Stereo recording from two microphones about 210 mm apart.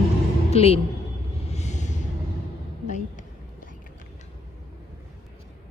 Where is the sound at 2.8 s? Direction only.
35° left (ahead or behind).